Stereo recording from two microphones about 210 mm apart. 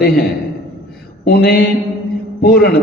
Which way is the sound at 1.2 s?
45° left (ahead or behind).